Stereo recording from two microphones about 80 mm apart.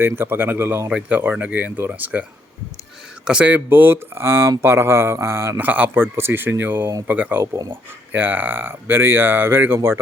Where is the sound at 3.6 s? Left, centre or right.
Right.